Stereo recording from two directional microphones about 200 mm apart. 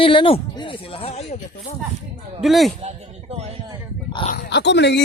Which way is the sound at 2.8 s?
35° right (ahead or behind).